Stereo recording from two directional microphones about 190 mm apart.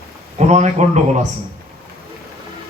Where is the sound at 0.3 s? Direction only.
35° right (ahead or behind).